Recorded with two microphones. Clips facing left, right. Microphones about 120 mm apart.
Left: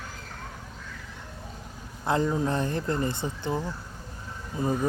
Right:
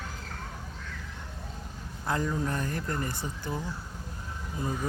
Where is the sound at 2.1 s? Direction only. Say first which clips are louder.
Left 5 dB; 25° left (ahead or behind).